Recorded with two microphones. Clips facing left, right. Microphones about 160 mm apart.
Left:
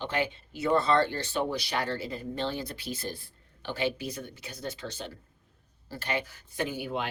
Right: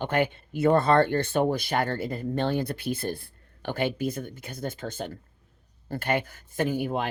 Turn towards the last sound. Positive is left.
turn(degrees=-45)  # may be behind; listen again after turning